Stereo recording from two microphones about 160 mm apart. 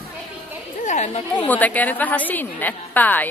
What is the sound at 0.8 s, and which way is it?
Speech, 50° left (ahead or behind).